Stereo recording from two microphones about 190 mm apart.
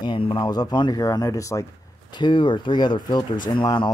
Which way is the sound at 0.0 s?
25° left (ahead or behind).